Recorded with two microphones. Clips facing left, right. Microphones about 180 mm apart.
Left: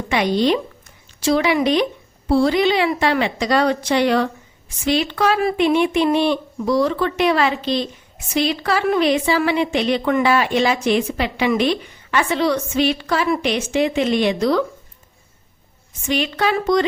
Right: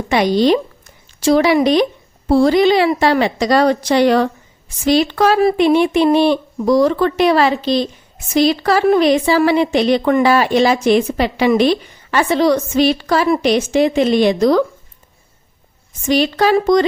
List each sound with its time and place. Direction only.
0.1 s a woman's voice: 35° right (ahead or behind)
16.0 s a woman's voice: 40° right (ahead or behind)